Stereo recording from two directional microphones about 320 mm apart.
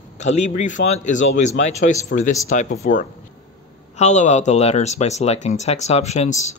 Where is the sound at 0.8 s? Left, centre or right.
Left.